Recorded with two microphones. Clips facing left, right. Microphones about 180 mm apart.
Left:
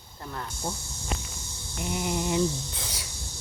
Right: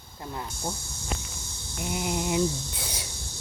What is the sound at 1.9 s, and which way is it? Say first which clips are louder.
Speech: even; 10° right (ahead or behind).